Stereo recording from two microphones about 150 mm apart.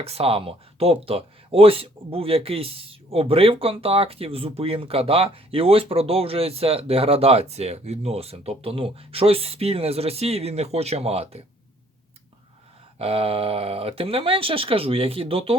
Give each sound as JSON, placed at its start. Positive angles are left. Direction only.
{"t": 0.0, "sound": "speech", "side_deg": -40}
{"t": 13.0, "sound": "speech", "side_deg": -40}